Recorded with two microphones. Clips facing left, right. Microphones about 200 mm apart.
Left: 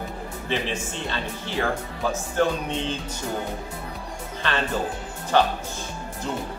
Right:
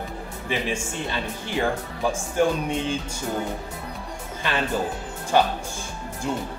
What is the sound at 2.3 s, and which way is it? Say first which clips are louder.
Speech: right 2 dB; 10° right (ahead or behind).